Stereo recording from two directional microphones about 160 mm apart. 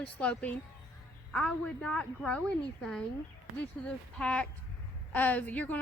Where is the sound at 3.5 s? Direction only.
5° left (ahead or behind).